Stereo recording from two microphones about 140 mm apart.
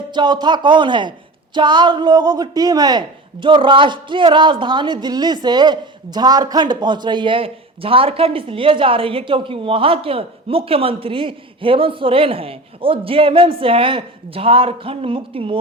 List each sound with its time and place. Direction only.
0.1 s a man's voice: 30° right (ahead or behind)